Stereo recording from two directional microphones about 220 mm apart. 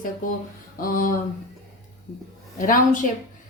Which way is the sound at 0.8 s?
40° left (ahead or behind).